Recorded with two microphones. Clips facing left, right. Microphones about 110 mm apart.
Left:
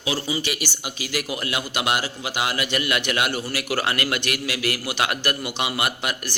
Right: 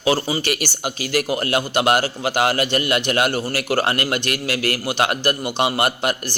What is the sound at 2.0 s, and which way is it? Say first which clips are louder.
Speech: right 7 dB; 65° right (ahead or behind).